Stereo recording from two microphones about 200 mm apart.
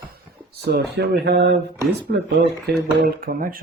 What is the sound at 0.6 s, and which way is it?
Speech, 55° right (ahead or behind).